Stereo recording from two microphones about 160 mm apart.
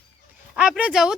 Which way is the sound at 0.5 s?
5° right (ahead or behind).